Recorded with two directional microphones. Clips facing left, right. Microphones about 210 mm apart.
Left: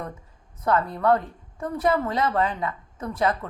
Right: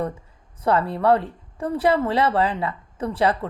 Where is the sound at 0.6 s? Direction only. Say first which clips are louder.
Right 3 dB; 30° right (ahead or behind).